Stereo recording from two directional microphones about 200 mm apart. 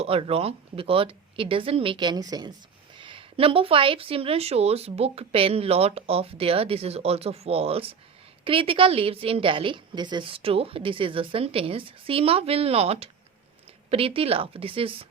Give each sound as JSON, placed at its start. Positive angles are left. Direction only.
{"t": 0.0, "sound": "speech", "side_deg": -30}